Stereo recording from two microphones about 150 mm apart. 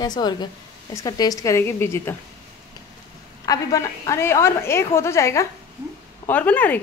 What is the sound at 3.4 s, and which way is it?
A woman's voice, 20° left (ahead or behind).